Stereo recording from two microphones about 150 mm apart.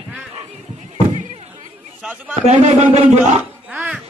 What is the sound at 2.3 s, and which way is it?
Speech, 50° right (ahead or behind).